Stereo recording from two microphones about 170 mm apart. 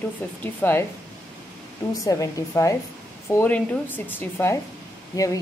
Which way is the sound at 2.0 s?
20° left (ahead or behind).